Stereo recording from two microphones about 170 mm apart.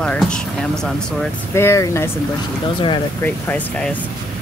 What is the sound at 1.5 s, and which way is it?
Speech, 15° left (ahead or behind).